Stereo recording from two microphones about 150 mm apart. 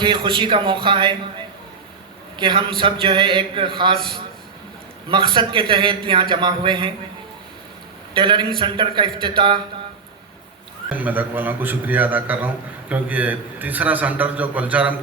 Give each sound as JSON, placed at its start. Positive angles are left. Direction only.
{"t": 0.0, "sound": "a man's voice", "side_deg": -35}
{"t": 2.3, "sound": "a man's voice", "side_deg": -35}
{"t": 8.1, "sound": "a man's voice", "side_deg": -30}
{"t": 10.9, "sound": "a man's voice", "side_deg": -10}